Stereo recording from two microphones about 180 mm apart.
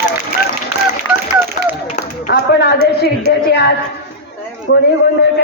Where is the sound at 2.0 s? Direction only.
70° left (ahead or behind).